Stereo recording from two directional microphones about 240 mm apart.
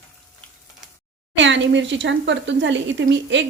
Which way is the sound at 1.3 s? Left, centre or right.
Right.